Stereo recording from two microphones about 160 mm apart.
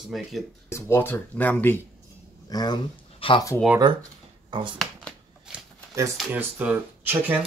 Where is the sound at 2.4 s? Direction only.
25° left (ahead or behind).